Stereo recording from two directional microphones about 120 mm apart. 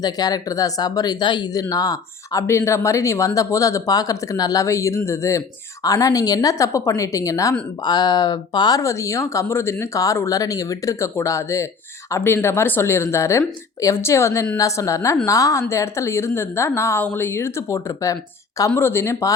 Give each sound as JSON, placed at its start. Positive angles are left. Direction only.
{"t": 0.0, "sound": "speech", "side_deg": 35}